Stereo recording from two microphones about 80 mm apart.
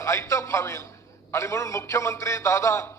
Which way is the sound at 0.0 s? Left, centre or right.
Left.